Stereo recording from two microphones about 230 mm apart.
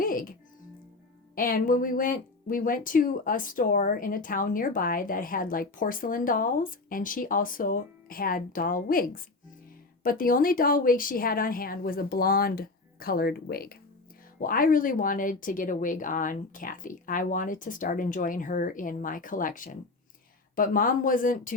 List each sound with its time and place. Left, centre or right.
0.0 s music: left
1.4 s speech: left